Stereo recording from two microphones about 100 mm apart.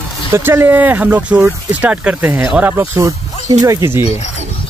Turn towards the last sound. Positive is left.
turn(degrees=-30)  # may be behind; listen again after turning